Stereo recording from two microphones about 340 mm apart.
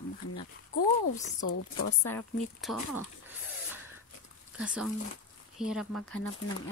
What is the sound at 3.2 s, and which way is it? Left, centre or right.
Pig, centre.